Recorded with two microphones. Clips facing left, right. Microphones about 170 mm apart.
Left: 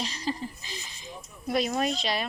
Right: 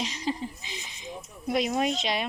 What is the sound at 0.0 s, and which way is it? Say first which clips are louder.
Speech: right 1 dB; 15° right (ahead or behind).